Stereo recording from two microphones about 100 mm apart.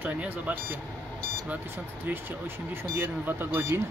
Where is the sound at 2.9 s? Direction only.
20° right (ahead or behind).